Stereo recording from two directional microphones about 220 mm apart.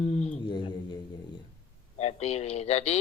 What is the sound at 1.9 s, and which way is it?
Speech, 30° left (ahead or behind).